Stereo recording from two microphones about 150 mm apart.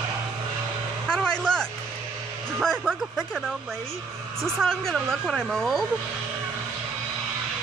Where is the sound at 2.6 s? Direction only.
5° left (ahead or behind).